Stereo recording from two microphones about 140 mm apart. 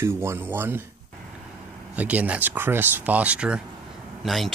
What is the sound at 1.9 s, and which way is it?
Speech, 10° right (ahead or behind).